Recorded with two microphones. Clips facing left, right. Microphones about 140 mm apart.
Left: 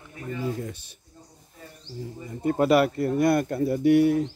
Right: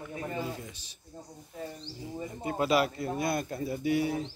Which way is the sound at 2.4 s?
55° left (ahead or behind).